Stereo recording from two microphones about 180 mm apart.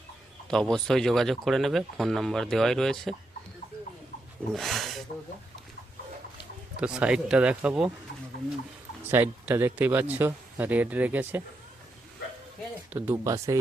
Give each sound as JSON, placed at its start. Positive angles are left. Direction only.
{"t": 0.4, "sound": "speech", "side_deg": 5}
{"t": 4.5, "sound": "speech", "side_deg": 0}
{"t": 6.7, "sound": "speech", "side_deg": -5}
{"t": 9.0, "sound": "speech", "side_deg": -10}
{"t": 12.9, "sound": "speech", "side_deg": -15}